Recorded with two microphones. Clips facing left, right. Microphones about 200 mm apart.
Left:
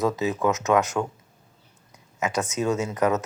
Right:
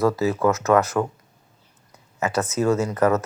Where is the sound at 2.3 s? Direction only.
15° left (ahead or behind).